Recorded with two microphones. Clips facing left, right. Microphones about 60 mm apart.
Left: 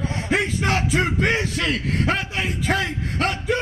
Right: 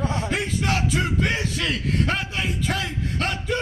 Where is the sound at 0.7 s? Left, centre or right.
Left.